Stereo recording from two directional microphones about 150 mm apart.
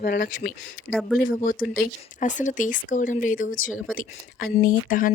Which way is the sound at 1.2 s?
70° left (ahead or behind).